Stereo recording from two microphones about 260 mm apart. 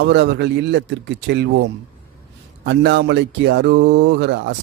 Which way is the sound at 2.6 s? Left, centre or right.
Right.